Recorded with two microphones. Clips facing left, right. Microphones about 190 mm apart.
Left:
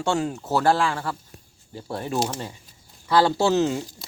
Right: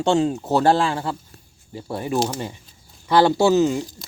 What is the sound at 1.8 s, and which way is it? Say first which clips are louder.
Speech: right 3 dB; 10° right (ahead or behind).